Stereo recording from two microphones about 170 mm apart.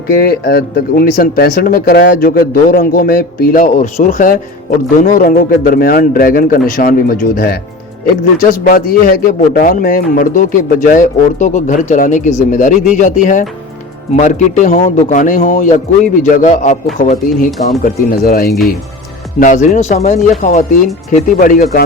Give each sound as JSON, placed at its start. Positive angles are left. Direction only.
{"t": 0.1, "sound": "speech", "side_deg": 70}
{"t": 17.8, "sound": "speech", "side_deg": 60}
{"t": 19.4, "sound": "speech", "side_deg": 50}